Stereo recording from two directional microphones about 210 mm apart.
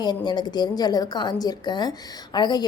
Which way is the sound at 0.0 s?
20° left (ahead or behind).